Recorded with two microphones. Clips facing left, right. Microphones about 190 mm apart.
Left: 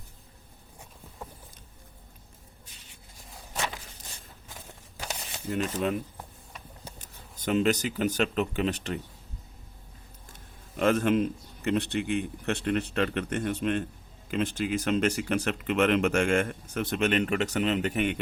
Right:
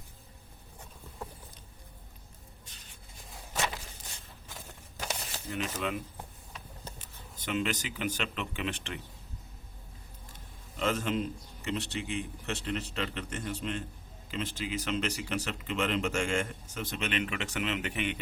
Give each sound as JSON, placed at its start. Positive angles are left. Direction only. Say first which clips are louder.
{"t": 5.5, "sound": "speech", "louder": "left 6 dB", "side_deg": 40}
{"t": 7.0, "sound": "speech", "louder": "left 11 dB", "side_deg": 40}
{"t": 10.8, "sound": "a man's voice", "louder": "left 7 dB", "side_deg": 55}